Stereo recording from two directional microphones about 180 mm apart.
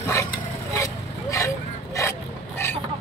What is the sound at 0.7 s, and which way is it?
Vehicle, 15° left (ahead or behind).